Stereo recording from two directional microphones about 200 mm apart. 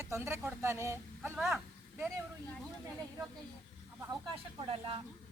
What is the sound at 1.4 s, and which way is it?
Speech, centre (ahead or behind).